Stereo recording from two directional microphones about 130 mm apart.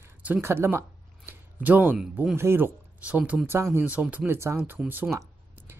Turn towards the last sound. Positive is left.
turn(degrees=-15)  # may be behind; listen again after turning